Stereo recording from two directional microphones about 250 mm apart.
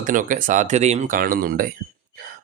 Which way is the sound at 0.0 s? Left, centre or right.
Right.